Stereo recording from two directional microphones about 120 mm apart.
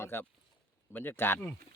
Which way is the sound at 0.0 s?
20° left (ahead or behind).